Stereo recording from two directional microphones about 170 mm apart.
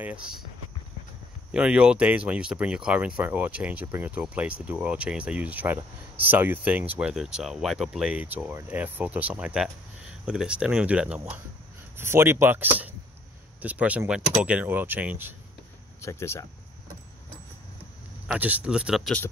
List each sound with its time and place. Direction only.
0.0 s speech: 5° right (ahead or behind)
1.5 s speech: 5° right (ahead or behind)
16.0 s speech: 15° left (ahead or behind)
18.3 s speech: 10° right (ahead or behind)